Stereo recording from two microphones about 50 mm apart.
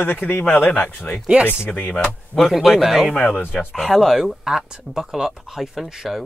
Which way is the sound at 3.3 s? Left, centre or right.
Left.